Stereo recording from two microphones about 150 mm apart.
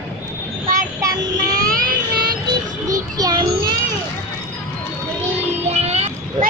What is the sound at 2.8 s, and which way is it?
Child singing, 25° right (ahead or behind).